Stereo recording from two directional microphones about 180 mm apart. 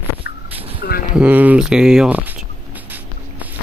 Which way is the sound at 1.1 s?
10° right (ahead or behind).